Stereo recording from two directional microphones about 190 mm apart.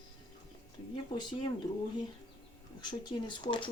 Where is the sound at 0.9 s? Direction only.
25° left (ahead or behind).